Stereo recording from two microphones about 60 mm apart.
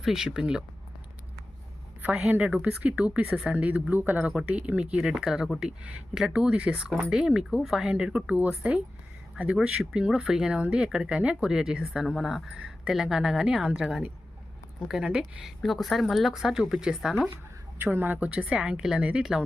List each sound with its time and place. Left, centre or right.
0.0 s speech: centre
2.0 s a woman's voice: right
3.2 s speech: centre
3.5 s a woman's voice: right
4.3 s a woman's voice: centre
4.9 s speech: centre
12.5 s a sound: centre
12.9 s speech: centre
17.8 s a woman's voice: right; by 19.2 s centre